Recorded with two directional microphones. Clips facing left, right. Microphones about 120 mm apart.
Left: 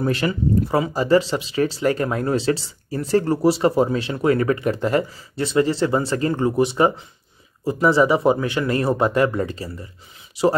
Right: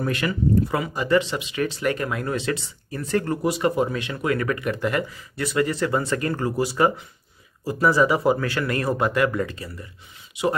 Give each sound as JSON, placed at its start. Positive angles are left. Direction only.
{"t": 0.0, "sound": "speech", "side_deg": 30}